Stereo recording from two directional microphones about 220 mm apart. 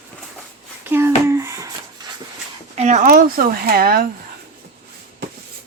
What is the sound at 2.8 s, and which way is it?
Speech, 30° right (ahead or behind).